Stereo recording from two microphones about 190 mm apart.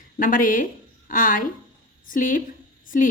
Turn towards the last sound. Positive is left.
turn(degrees=45)  # may be behind; listen again after turning